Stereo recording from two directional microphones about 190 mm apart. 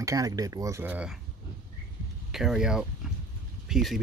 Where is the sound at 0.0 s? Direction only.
20° right (ahead or behind).